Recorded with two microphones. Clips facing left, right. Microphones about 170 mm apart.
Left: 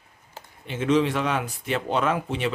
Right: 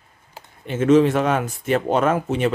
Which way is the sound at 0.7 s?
45° right (ahead or behind).